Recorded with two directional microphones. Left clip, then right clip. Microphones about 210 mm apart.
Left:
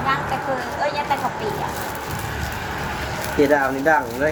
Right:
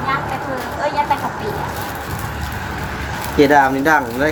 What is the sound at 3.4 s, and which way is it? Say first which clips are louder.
Speech: right 6 dB; 50° right (ahead or behind).